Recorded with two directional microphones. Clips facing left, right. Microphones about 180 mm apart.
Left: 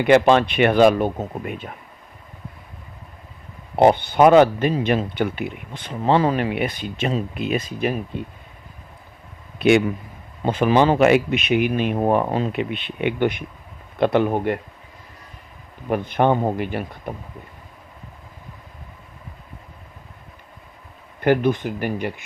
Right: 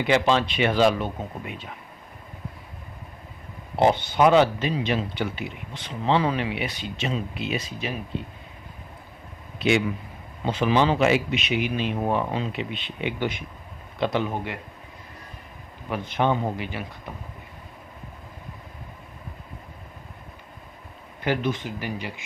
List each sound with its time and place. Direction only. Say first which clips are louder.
0.0 s speech: left 7 dB; 55° left (ahead or behind)
3.8 s speech: left 5 dB; 55° left (ahead or behind)
9.6 s a man's voice: left 6 dB; 55° left (ahead or behind)
15.9 s speech: left 5 dB; 55° left (ahead or behind)
21.2 s speech: left 7 dB; 55° left (ahead or behind)